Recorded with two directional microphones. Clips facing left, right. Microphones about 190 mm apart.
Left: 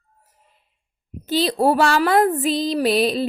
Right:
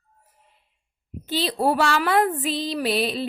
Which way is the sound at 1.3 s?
40° left (ahead or behind).